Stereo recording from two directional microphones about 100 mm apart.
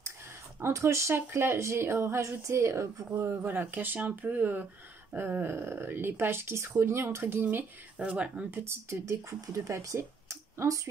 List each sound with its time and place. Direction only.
0.6 s speech: 25° right (ahead or behind)
7.4 s speech: 15° right (ahead or behind); by 10.8 s 30° right (ahead or behind)